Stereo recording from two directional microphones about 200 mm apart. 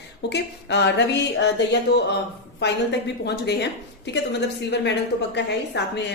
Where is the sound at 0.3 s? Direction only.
60° left (ahead or behind).